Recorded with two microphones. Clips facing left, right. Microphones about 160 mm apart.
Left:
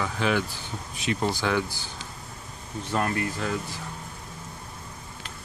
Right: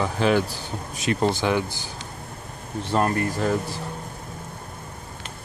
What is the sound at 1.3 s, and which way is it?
Speech, 20° right (ahead or behind).